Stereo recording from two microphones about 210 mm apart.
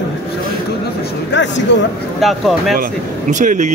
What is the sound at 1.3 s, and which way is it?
Speech, 60° left (ahead or behind).